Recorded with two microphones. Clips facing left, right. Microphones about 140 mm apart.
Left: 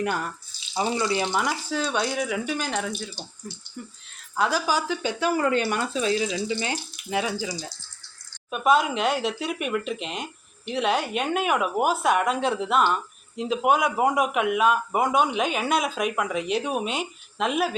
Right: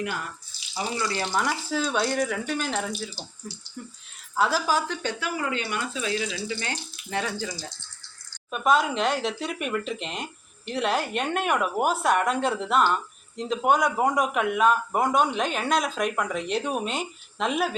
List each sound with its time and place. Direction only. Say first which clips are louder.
0.8 s speech: left 4 dB; 20° left (ahead or behind)
1.3 s speech: even; centre (ahead or behind)
5.4 s speech: left 6 dB; 45° left (ahead or behind); by 6.7 s 20° left (ahead or behind)
7.1 s speech: left 3 dB; 10° left (ahead or behind)